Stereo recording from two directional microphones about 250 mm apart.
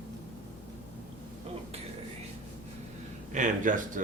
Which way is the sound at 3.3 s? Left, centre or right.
Right.